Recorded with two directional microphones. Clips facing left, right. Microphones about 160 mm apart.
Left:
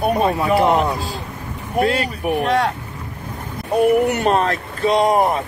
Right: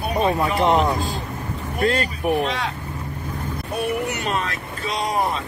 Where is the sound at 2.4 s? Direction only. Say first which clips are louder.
Left 7 dB; 55° left (ahead or behind).